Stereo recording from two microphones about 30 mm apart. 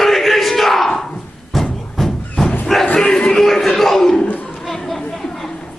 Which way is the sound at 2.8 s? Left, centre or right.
Left.